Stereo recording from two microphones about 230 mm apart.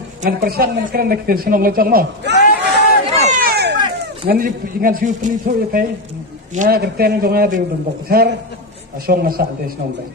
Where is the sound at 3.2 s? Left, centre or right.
Right.